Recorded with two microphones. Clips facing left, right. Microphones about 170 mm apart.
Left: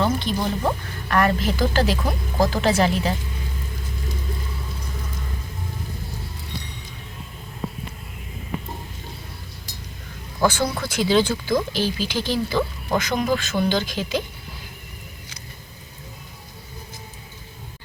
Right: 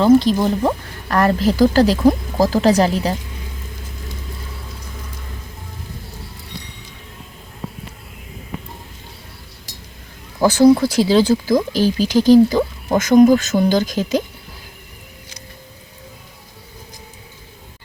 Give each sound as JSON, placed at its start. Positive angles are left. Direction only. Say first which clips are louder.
{"t": 0.0, "sound": "speech", "louder": "right 10 dB", "side_deg": -35}
{"t": 10.4, "sound": "speech", "louder": "right 11 dB", "side_deg": -35}